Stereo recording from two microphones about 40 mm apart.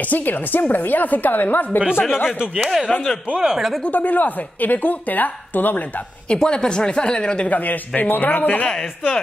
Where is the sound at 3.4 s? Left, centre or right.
Centre.